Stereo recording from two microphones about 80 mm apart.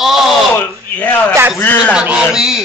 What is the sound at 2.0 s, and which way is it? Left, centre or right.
Speech, centre.